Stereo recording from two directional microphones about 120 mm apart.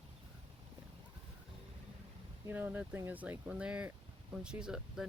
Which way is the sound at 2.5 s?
15° right (ahead or behind).